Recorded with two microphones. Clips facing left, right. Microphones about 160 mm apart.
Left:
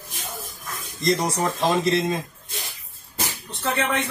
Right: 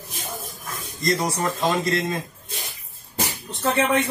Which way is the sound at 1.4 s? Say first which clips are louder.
Left 1 dB; 15° left (ahead or behind).